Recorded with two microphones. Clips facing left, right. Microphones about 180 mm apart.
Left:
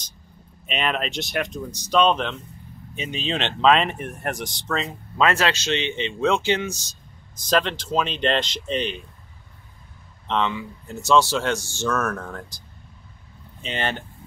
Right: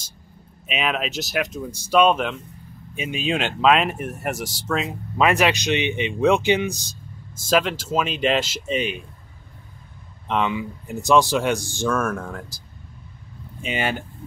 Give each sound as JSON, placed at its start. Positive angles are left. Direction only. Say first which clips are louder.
{"t": 0.7, "sound": "speech", "louder": "right 1 dB", "side_deg": -5}
{"t": 4.8, "sound": "speech", "louder": "right 1 dB", "side_deg": -15}
{"t": 10.2, "sound": "speech", "louder": "right 1 dB", "side_deg": -15}